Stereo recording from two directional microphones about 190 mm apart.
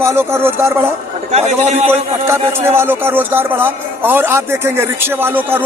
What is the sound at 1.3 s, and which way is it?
Speech, 35° right (ahead or behind).